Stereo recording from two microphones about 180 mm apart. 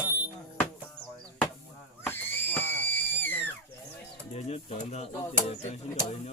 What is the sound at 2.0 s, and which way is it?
Screaming, 10° left (ahead or behind).